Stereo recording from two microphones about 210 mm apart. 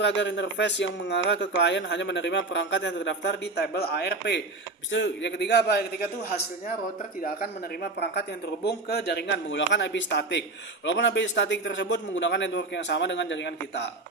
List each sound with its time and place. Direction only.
0.0 s speech: 55° left (ahead or behind)
7.2 s speech: 40° left (ahead or behind)
7.9 s speech: 50° left (ahead or behind)